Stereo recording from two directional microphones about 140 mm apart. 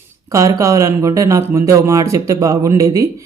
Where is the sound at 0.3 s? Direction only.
25° right (ahead or behind).